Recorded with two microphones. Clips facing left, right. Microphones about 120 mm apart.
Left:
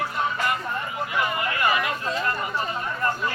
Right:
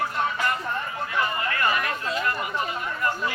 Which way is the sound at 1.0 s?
15° left (ahead or behind).